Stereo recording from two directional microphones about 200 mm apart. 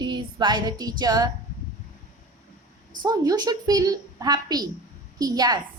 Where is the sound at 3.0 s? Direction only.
20° right (ahead or behind).